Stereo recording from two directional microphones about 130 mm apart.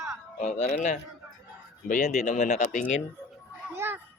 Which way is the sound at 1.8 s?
75° left (ahead or behind).